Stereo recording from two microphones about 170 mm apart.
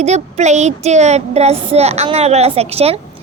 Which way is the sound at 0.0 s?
40° right (ahead or behind).